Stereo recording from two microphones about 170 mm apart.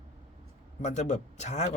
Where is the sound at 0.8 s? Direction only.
45° left (ahead or behind).